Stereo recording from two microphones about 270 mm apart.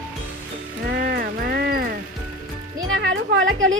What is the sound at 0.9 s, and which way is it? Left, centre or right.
Music, right.